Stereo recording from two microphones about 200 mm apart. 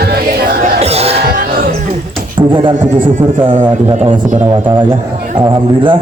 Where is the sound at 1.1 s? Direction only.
50° right (ahead or behind).